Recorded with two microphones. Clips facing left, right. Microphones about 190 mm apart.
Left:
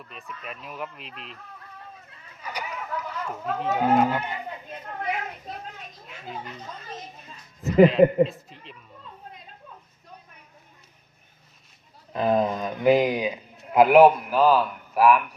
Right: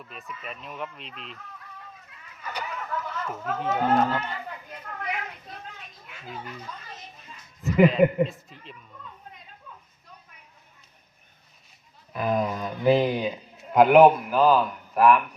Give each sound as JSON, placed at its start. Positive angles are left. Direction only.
{"t": 0.0, "sound": "speech", "side_deg": 0}
{"t": 2.4, "sound": "a sound", "side_deg": 10}
{"t": 3.3, "sound": "speech", "side_deg": 0}
{"t": 3.8, "sound": "livestock", "side_deg": 10}
{"t": 8.0, "sound": "speech", "side_deg": 30}
{"t": 12.1, "sound": "a man's voice", "side_deg": 25}